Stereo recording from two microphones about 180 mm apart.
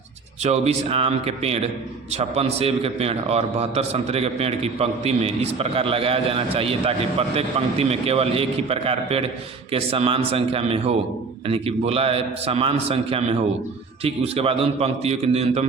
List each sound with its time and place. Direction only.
0.4 s a man's voice: 35° right (ahead or behind)